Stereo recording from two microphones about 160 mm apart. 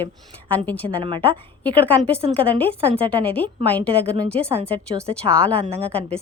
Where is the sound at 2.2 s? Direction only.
35° right (ahead or behind).